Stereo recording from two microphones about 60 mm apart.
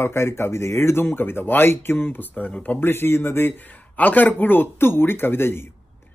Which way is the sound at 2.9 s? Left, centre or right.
Left.